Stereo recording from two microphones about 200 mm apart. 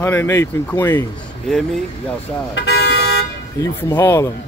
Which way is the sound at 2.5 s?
55° left (ahead or behind).